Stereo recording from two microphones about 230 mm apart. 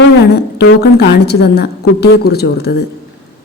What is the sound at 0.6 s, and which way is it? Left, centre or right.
A woman's voice, left.